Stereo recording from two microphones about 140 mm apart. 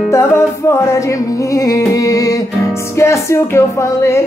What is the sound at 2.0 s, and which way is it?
Music, 25° left (ahead or behind).